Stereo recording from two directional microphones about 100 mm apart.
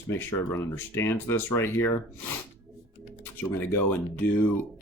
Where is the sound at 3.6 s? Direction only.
20° left (ahead or behind).